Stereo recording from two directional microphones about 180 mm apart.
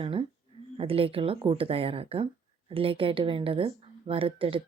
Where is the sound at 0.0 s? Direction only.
30° right (ahead or behind).